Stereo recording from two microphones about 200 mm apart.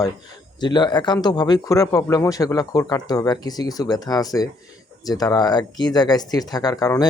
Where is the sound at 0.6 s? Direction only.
20° left (ahead or behind).